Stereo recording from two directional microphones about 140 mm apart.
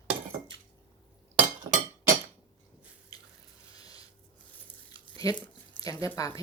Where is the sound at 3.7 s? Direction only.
25° left (ahead or behind).